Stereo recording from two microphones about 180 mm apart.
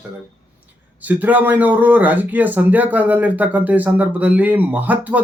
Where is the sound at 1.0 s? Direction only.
10° right (ahead or behind).